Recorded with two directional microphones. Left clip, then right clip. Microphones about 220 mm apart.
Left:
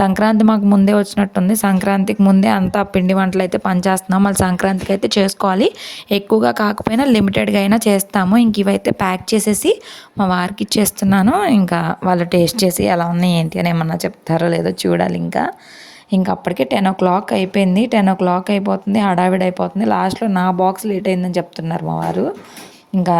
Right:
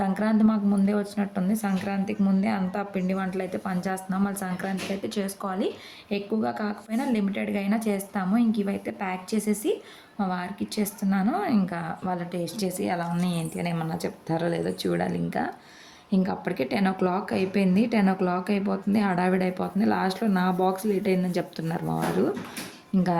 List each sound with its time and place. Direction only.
0.0 s a woman's voice: 40° left (ahead or behind)